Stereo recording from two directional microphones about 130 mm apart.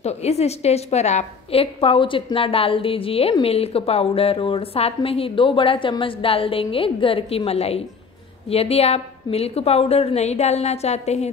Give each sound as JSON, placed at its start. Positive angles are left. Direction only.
{"t": 0.0, "sound": "a woman's voice", "side_deg": 55}